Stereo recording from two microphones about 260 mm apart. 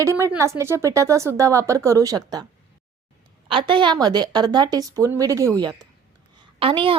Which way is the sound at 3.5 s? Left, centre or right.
Centre.